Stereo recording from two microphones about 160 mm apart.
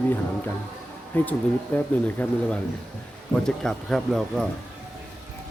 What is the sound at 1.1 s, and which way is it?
A man's voice, 10° left (ahead or behind).